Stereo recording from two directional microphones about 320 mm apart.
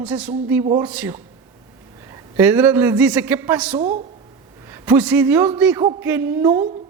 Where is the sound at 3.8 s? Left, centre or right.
Right.